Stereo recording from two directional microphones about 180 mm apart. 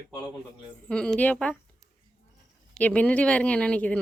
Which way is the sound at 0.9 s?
5° left (ahead or behind).